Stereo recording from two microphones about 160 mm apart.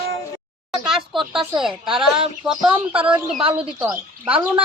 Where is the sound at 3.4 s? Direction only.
35° right (ahead or behind).